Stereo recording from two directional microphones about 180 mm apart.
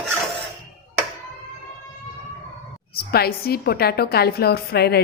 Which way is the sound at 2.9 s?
60° left (ahead or behind).